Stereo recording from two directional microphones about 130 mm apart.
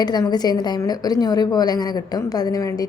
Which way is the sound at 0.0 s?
30° left (ahead or behind).